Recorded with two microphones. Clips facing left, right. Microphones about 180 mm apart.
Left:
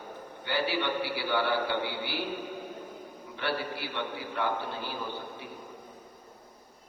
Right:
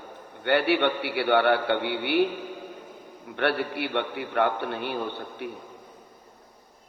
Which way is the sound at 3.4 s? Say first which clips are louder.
Right 7 dB; 65° right (ahead or behind).